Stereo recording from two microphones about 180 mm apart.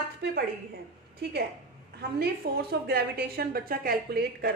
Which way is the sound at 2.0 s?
60° right (ahead or behind).